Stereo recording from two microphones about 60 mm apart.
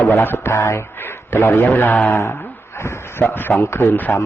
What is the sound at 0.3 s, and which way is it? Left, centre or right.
A man's voice, left.